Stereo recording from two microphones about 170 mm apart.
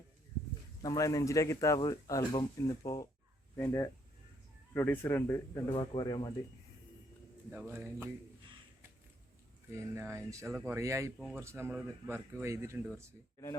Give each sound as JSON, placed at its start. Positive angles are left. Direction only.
{"t": 0.8, "sound": "speech", "side_deg": 20}
{"t": 5.6, "sound": "speech", "side_deg": 30}
{"t": 7.5, "sound": "speech", "side_deg": -15}
{"t": 9.9, "sound": "speech", "side_deg": -15}